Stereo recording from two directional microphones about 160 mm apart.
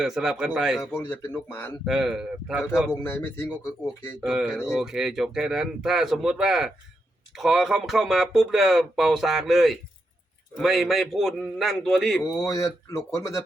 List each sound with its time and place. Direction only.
0.0 s speech: 5° right (ahead or behind)
0.9 s speech: 15° left (ahead or behind)
1.8 s speech: 5° right (ahead or behind)
2.9 s speech: 15° left (ahead or behind)
4.2 s speech: 5° right (ahead or behind)
12.2 s speech: 20° left (ahead or behind)